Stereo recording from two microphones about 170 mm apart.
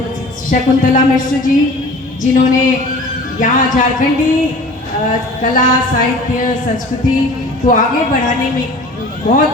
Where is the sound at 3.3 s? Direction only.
50° left (ahead or behind).